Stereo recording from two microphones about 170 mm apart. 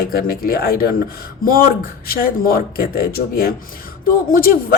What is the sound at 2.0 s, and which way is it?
Speech, 60° left (ahead or behind).